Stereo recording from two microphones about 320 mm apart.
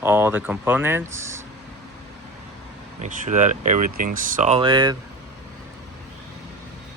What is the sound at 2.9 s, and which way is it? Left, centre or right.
Speech, right.